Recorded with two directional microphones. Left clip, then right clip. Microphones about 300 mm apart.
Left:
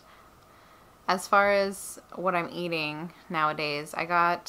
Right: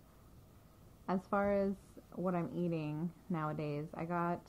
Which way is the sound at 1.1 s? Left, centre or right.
Centre.